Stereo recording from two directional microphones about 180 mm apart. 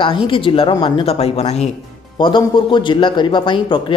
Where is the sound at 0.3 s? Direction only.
30° left (ahead or behind).